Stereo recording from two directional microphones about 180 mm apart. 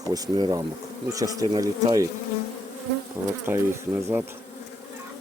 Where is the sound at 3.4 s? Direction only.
15° right (ahead or behind).